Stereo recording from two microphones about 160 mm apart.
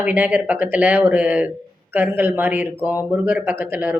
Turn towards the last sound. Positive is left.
turn(degrees=-10)  # may be behind; listen again after turning